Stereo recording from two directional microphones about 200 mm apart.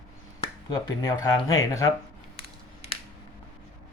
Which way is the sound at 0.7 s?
20° left (ahead or behind).